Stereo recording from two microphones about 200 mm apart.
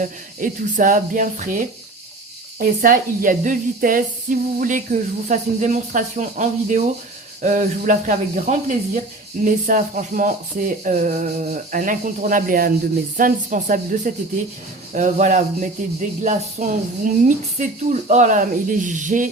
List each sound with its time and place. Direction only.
0.0 s a woman's voice: 40° right (ahead or behind)